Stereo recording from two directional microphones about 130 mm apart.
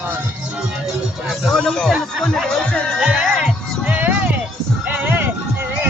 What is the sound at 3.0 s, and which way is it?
Music, centre (ahead or behind).